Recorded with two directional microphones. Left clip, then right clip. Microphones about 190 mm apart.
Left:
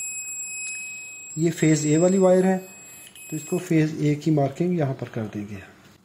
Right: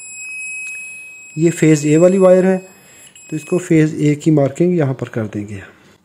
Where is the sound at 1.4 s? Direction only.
40° right (ahead or behind).